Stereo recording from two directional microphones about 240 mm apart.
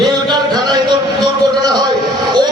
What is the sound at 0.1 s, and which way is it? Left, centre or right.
Music, centre.